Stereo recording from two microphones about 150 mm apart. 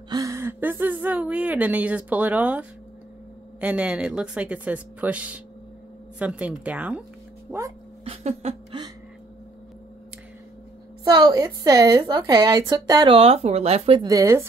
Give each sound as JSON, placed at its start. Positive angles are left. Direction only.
{"t": 0.1, "sound": "speech", "side_deg": -20}
{"t": 3.6, "sound": "speech", "side_deg": -5}
{"t": 8.0, "sound": "a sound", "side_deg": -45}
{"t": 11.1, "sound": "a woman's voice", "side_deg": -30}
{"t": 13.1, "sound": "speech", "side_deg": -40}
{"t": 13.9, "sound": "a woman's voice", "side_deg": -20}